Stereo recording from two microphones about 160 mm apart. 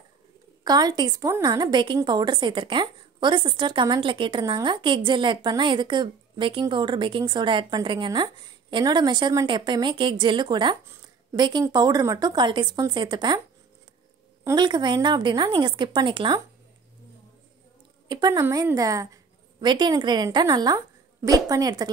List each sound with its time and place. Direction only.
0.7 s a woman's voice: 25° right (ahead or behind)
14.4 s a woman's voice: 25° right (ahead or behind)
18.0 s a woman's voice: 25° right (ahead or behind)